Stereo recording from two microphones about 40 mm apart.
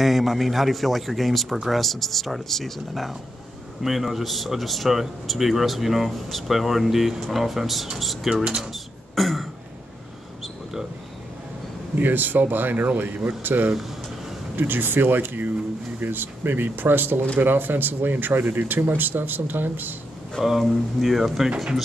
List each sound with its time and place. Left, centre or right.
0.0 s speech: centre
9.1 s throat clearing: centre
11.9 s speech: right
20.4 s speech: centre